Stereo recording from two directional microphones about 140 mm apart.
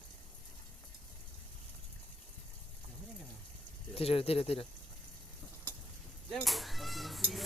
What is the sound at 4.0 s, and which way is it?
Speech, 45° left (ahead or behind).